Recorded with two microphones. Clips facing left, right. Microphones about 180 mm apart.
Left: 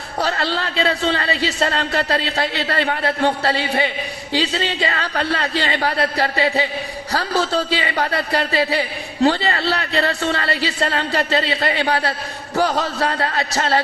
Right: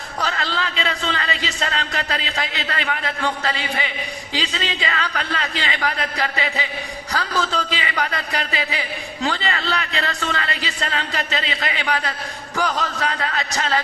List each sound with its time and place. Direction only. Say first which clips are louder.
0.2 s a man's voice: left 4 dB; 35° left (ahead or behind)